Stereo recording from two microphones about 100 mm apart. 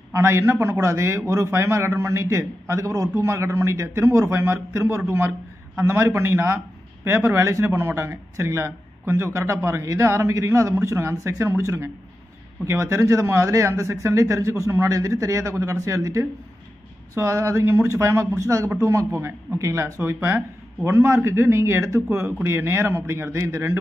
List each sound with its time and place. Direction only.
0.1 s a man's voice: 25° right (ahead or behind)